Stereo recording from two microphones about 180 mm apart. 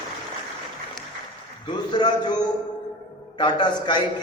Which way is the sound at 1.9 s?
25° left (ahead or behind).